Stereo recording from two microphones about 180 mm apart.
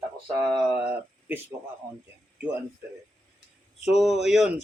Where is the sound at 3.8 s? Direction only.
Centre (ahead or behind).